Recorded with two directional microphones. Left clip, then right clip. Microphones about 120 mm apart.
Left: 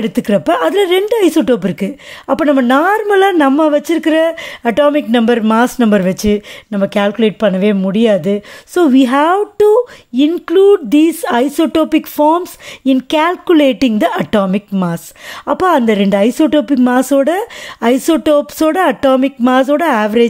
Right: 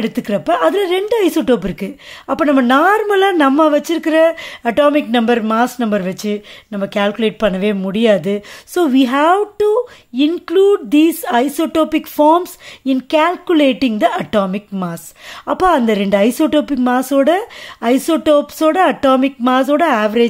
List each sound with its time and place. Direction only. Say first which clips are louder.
0.0 s speech: left 4 dB; 40° left (ahead or behind)
6.8 s speech: left 3 dB; 30° left (ahead or behind)
9.0 s a woman's voice: left 1 dB; 35° left (ahead or behind)